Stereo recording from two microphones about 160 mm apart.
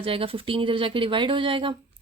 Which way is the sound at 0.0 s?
35° right (ahead or behind).